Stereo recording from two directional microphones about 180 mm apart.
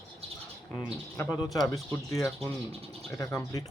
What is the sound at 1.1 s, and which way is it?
Speech, 10° left (ahead or behind).